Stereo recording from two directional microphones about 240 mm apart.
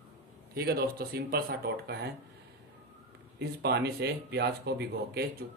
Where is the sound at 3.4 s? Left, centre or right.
Right.